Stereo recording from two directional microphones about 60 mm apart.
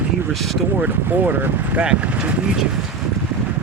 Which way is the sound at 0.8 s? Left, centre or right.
Right.